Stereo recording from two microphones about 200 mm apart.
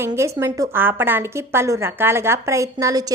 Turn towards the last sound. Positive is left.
turn(degrees=-20)  # may be behind; listen again after turning